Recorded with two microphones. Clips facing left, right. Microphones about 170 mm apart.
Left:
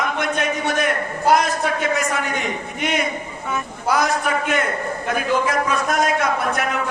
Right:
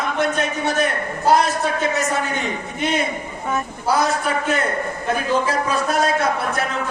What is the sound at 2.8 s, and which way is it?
Speech, 30° right (ahead or behind).